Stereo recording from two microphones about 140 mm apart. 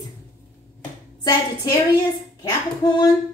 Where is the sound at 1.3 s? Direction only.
25° left (ahead or behind).